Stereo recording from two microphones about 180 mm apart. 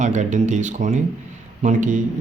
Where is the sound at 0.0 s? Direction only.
40° right (ahead or behind).